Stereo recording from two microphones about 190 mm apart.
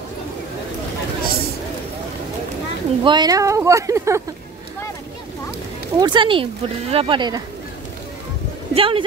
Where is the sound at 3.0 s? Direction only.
25° right (ahead or behind).